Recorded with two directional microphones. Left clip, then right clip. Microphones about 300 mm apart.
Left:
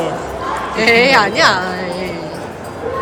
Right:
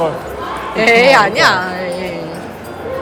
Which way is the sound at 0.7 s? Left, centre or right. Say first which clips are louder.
Right 2 dB; centre.